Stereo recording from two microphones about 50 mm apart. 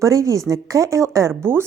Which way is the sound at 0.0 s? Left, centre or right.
Right.